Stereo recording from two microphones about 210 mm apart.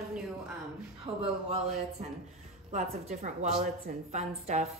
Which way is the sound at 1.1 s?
25° right (ahead or behind).